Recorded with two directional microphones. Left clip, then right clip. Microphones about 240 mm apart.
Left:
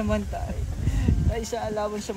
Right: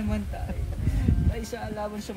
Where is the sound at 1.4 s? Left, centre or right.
Left.